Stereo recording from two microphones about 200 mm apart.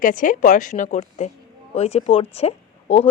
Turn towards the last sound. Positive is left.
turn(degrees=30)  # may be behind; listen again after turning